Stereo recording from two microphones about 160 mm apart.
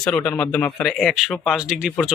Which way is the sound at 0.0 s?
5° left (ahead or behind).